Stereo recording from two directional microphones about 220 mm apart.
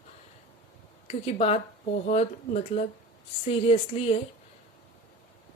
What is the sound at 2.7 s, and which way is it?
Speech, 25° left (ahead or behind).